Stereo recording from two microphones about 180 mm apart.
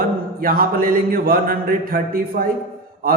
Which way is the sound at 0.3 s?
55° right (ahead or behind).